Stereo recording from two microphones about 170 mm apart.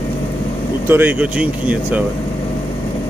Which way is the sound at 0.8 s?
10° right (ahead or behind).